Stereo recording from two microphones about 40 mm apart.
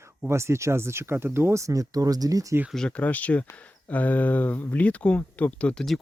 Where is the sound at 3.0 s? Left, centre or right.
Left.